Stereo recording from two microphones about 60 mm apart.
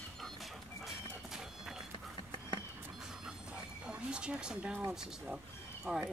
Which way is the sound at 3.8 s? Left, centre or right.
Centre.